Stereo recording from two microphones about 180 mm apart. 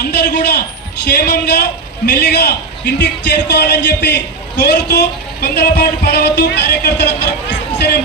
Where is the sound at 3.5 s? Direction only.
70° left (ahead or behind).